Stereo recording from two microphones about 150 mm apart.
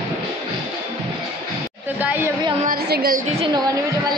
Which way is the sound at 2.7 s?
85° right.